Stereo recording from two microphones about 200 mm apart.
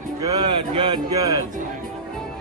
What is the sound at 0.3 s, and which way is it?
Speech, 25° right (ahead or behind).